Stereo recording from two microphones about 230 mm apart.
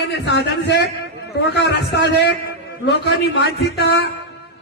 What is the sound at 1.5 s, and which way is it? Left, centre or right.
Speech, left.